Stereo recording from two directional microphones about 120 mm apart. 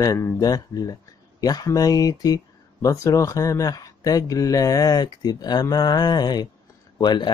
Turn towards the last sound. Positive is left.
turn(degrees=40)  # may be behind; listen again after turning